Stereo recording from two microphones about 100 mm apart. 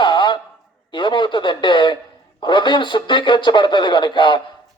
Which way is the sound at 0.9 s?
55° left (ahead or behind).